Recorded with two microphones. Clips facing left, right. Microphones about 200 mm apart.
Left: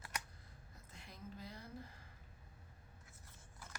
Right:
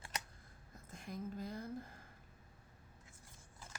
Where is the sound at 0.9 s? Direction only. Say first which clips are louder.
Right 9 dB; 45° right (ahead or behind).